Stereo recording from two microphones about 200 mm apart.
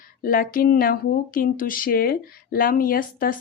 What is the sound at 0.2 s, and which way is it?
Speech, 45° left (ahead or behind).